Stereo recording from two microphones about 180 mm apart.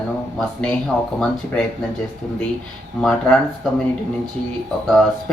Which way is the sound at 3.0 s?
5° left (ahead or behind).